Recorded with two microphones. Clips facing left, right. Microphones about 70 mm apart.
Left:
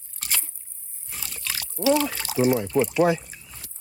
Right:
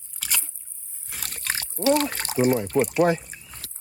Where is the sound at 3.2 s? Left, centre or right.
Right.